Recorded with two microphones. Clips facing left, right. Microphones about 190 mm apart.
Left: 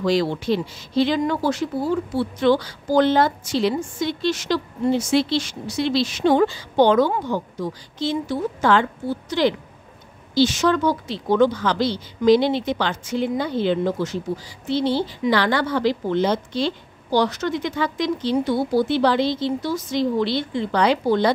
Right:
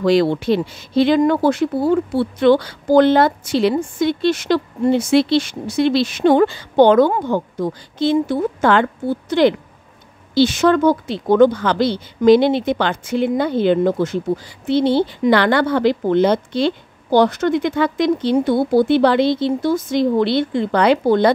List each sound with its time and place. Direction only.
0.0 s speech: 60° right (ahead or behind)